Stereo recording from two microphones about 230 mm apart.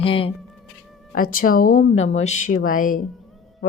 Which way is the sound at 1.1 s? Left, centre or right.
Left.